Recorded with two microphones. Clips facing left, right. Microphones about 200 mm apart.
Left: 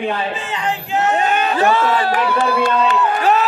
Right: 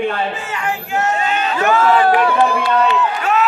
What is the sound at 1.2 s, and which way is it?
Crowd, 55° left (ahead or behind).